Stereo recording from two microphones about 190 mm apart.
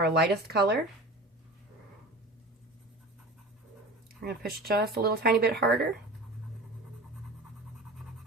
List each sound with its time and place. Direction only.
0.0 s speech: 60° right (ahead or behind)
4.2 s speech: 55° right (ahead or behind)